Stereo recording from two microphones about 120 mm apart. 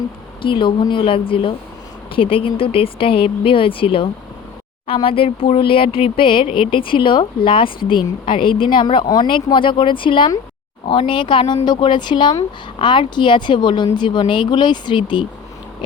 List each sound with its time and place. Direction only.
0.4 s a woman's voice: 45° left (ahead or behind)